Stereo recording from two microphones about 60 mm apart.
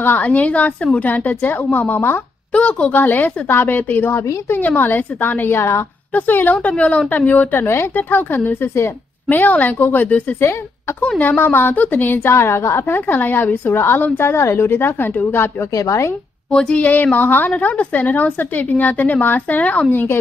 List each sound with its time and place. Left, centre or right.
0.0 s a woman's voice: left
2.5 s a woman's voice: left
6.1 s a woman's voice: left
7.5 s a woman's voice: left
12.3 s a woman's voice: left
15.7 s speech: left
16.4 s speech: centre
16.8 s a woman's voice: left